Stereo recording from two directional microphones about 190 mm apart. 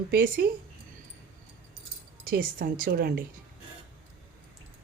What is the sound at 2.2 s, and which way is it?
Speech, 50° right (ahead or behind).